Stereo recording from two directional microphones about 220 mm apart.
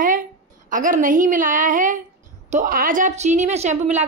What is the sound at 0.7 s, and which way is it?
Speech, 35° right (ahead or behind).